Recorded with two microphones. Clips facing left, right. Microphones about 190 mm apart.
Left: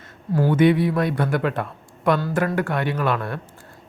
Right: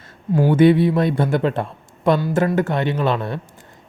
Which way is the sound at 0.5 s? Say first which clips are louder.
Right 4 dB; 30° right (ahead or behind).